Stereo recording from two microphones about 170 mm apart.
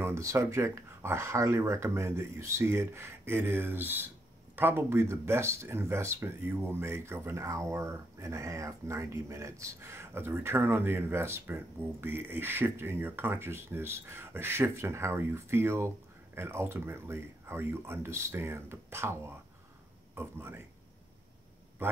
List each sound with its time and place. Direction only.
0.0 s speech: 15° right (ahead or behind)